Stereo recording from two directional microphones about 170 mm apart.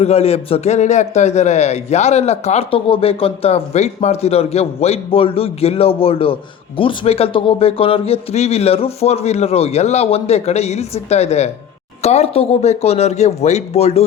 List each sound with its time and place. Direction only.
0.0 s a man's voice: 35° left (ahead or behind)